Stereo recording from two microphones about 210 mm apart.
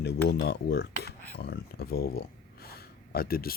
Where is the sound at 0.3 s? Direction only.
50° left (ahead or behind).